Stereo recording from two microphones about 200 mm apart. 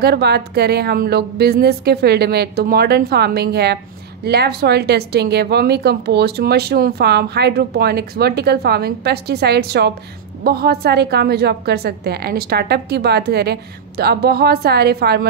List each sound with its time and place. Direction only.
0.0 s a woman's voice: 55° right (ahead or behind)